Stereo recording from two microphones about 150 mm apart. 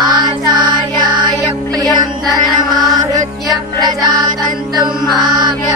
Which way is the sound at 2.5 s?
Centre (ahead or behind).